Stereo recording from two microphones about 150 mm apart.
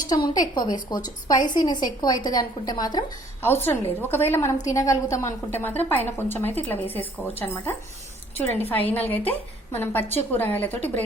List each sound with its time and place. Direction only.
0.3 s a woman's voice: 25° left (ahead or behind)
3.4 s a woman's voice: 15° left (ahead or behind)